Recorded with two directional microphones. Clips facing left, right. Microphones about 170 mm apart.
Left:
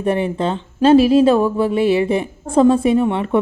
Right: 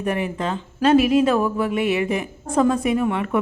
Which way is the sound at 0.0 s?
30° left (ahead or behind).